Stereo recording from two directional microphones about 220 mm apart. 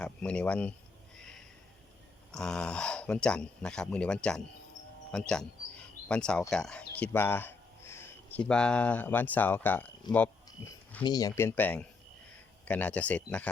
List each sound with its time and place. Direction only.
0.0 s speech: 5° left (ahead or behind)
1.2 s a sound: centre (ahead or behind)
2.3 s speech: 5° left (ahead or behind)
5.3 s insect: 5° left (ahead or behind)
6.5 s speech: 5° left (ahead or behind)